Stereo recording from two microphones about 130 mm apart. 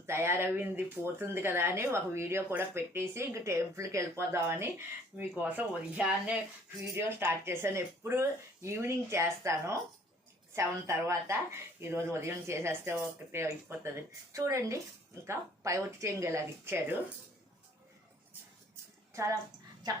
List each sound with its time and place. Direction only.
0.0 s speech: 20° right (ahead or behind)
6.8 s speech: 20° right (ahead or behind)
19.1 s a woman's voice: 25° right (ahead or behind)